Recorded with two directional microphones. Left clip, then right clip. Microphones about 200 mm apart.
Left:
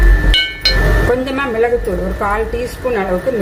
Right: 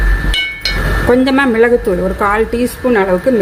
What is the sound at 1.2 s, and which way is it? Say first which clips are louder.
Speech: right 5 dB; 45° right (ahead or behind).